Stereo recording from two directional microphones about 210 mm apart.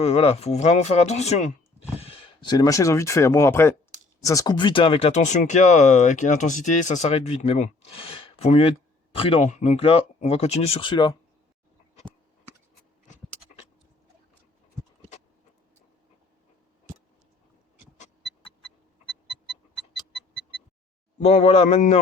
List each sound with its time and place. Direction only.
0.0 s speech: 30° left (ahead or behind)
21.2 s speech: 30° left (ahead or behind)